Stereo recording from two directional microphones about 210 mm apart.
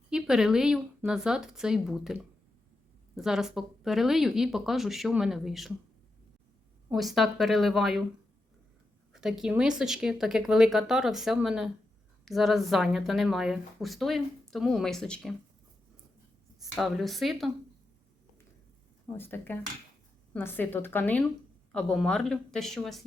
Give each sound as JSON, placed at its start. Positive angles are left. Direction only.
{"t": 0.1, "sound": "speech", "side_deg": -5}
{"t": 6.9, "sound": "speech", "side_deg": 0}
{"t": 9.1, "sound": "speech", "side_deg": 0}
{"t": 16.6, "sound": "speech", "side_deg": 0}
{"t": 19.1, "sound": "a woman's voice", "side_deg": 10}